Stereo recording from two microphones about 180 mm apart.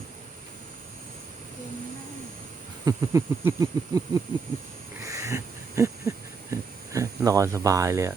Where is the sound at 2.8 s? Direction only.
20° right (ahead or behind).